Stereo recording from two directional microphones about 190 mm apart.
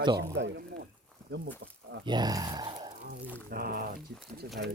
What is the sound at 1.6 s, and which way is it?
Speech, 90° right.